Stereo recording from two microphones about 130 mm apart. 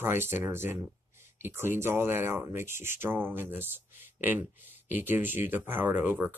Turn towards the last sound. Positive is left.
turn(degrees=-15)  # may be behind; listen again after turning